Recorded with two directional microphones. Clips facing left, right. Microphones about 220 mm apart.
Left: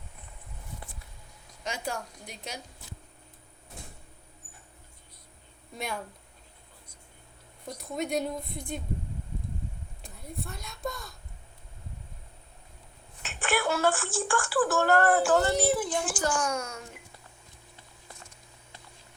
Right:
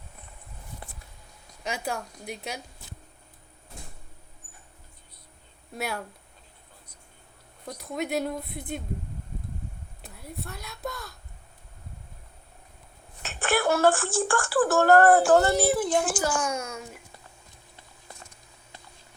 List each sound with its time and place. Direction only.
1.6 s speech: 10° right (ahead or behind)
5.7 s speech: 5° right (ahead or behind)
7.9 s speech: centre (ahead or behind)
10.0 s a woman's voice: centre (ahead or behind)
13.2 s speech: 40° right (ahead or behind)
15.9 s speech: 60° right (ahead or behind)
16.2 s a woman's voice: 5° right (ahead or behind)